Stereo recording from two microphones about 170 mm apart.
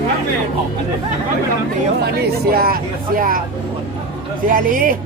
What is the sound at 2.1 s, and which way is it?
Speech, 60° right (ahead or behind).